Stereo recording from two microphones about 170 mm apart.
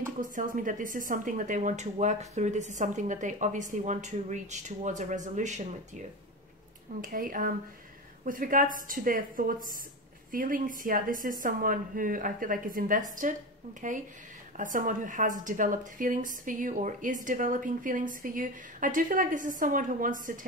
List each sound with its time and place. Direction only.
0.2 s a woman's voice: 50° right (ahead or behind)
7.0 s a woman's voice: 55° right (ahead or behind)